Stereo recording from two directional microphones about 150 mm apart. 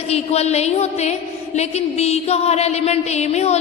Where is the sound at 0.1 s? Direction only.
45° left (ahead or behind).